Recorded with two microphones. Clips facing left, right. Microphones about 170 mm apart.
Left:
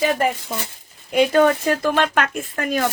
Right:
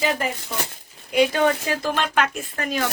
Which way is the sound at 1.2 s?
50° left (ahead or behind).